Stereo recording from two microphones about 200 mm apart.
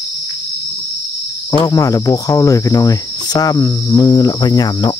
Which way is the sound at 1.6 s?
15° left (ahead or behind).